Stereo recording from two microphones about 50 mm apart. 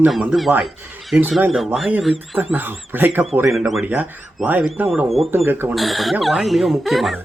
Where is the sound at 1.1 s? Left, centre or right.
Right.